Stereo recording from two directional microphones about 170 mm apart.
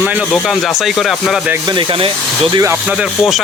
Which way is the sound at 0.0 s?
10° right (ahead or behind).